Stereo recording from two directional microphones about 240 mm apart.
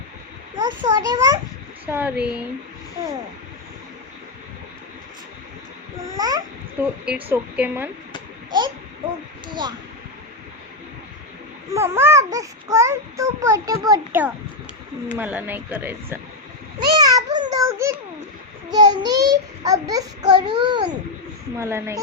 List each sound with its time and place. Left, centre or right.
0.6 s a child's voice: centre
6.1 s a child's voice: centre
7.0 s a woman's voice: centre
8.5 s speech: centre
11.7 s a child's voice: centre
17.2 s a sound: centre
18.7 s a child's voice: centre